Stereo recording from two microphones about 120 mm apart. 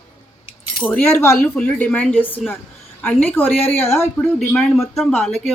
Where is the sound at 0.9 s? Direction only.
20° left (ahead or behind).